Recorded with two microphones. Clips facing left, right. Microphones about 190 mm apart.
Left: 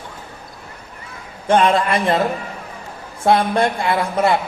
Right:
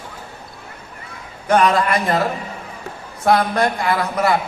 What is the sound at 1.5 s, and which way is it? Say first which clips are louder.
Speech: even; 25° left (ahead or behind).